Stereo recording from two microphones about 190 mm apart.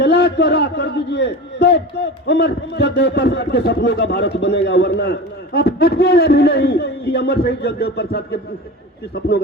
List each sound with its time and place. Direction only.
0.0 s a man's voice: 60° left (ahead or behind)